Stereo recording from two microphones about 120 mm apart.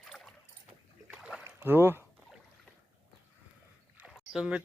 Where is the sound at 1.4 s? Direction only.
20° right (ahead or behind).